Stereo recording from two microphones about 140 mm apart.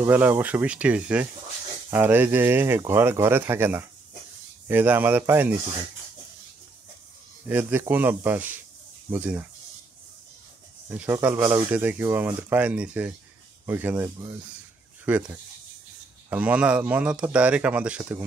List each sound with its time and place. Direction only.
0.0 s speech: 15° right (ahead or behind)
7.4 s speech: 15° right (ahead or behind)
10.9 s speech: 15° right (ahead or behind)